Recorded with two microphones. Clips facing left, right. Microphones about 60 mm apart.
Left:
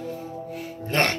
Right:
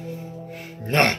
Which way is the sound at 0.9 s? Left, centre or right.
Right.